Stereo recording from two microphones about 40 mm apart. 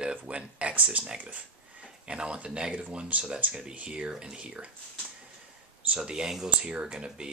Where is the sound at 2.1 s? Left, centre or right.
Right.